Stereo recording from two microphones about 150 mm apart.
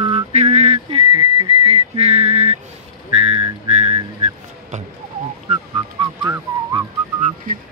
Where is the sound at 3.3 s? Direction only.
35° right (ahead or behind).